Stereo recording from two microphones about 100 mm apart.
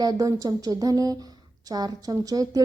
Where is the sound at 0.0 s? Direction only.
35° right (ahead or behind).